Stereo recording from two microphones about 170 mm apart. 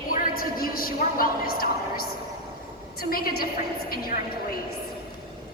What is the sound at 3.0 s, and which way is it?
Speech, 60° left (ahead or behind).